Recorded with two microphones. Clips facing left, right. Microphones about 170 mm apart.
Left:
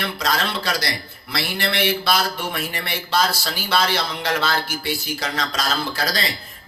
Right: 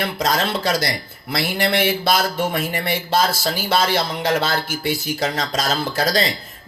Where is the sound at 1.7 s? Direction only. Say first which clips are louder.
Right 1 dB; 50° right (ahead or behind).